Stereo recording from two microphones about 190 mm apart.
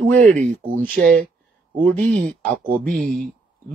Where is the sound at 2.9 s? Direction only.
5° left (ahead or behind).